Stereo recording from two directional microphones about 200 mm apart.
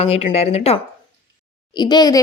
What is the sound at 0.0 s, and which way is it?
Speech, 30° left (ahead or behind).